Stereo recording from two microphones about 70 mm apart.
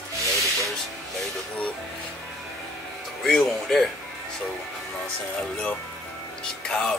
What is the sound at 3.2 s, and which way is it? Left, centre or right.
Speech, centre.